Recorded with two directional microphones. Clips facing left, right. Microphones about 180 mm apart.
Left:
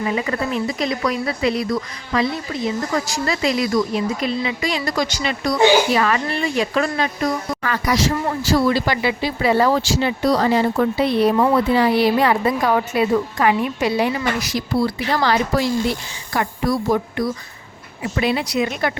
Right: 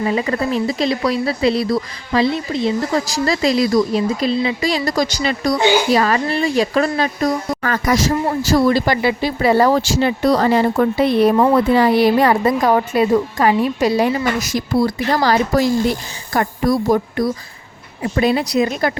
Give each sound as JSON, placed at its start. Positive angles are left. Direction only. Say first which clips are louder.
{"t": 0.0, "sound": "speech", "louder": "right 3 dB", "side_deg": -35}